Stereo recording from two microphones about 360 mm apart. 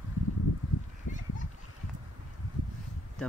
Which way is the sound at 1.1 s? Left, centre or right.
Left.